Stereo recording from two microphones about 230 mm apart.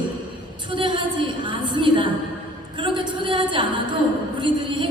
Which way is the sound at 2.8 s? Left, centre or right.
Right.